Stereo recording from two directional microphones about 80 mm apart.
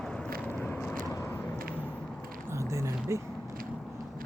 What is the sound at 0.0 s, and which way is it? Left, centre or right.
Biting, centre.